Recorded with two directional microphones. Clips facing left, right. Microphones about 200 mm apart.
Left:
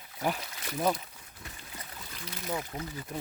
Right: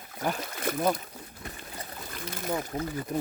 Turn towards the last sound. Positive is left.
turn(degrees=-55)  # may be behind; listen again after turning